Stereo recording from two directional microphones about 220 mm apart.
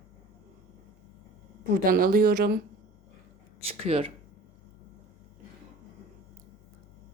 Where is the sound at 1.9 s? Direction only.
40° right (ahead or behind).